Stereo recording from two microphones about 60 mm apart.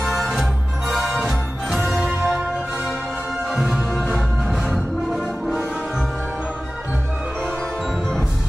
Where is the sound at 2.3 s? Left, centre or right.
Centre.